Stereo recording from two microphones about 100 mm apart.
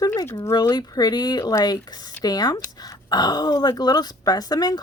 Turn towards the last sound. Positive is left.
turn(degrees=40)  # may be behind; listen again after turning